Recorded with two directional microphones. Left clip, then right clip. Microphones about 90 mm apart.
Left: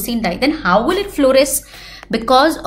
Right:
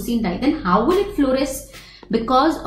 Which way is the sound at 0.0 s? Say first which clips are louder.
Left 4 dB; 20° left (ahead or behind).